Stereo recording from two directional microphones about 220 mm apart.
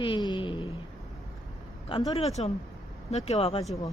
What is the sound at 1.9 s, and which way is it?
A woman's voice, 25° left (ahead or behind).